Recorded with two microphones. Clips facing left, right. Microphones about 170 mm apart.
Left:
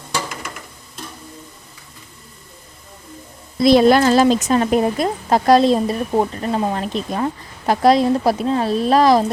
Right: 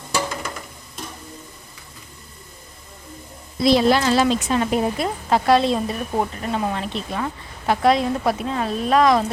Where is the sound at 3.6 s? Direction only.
50° left (ahead or behind); by 9.2 s 35° left (ahead or behind).